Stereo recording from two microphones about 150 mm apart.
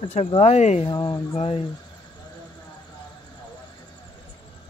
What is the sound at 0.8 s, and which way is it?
Speech, 30° left (ahead or behind).